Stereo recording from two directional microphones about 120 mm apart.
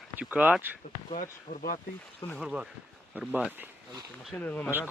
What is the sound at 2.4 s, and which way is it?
Speech, 5° right (ahead or behind).